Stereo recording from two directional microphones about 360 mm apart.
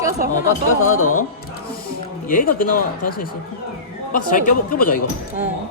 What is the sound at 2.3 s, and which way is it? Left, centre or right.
Speech, left.